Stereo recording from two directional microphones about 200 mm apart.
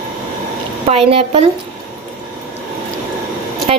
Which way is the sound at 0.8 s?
30° right (ahead or behind).